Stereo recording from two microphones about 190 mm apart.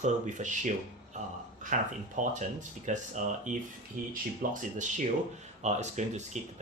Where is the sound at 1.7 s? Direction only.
40° right (ahead or behind).